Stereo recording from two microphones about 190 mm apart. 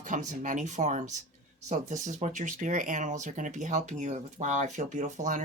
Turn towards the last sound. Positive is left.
turn(degrees=-40)  # may be behind; listen again after turning